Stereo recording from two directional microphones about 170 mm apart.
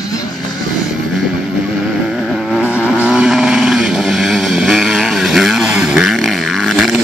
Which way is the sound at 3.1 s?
5° right (ahead or behind).